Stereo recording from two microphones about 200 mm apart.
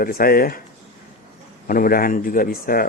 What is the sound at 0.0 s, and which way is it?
Speech, 45° left (ahead or behind).